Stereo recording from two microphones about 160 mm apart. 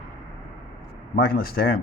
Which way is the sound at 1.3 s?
70° left (ahead or behind).